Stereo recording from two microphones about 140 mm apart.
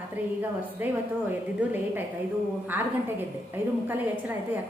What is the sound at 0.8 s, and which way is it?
A woman's voice, 15° right (ahead or behind).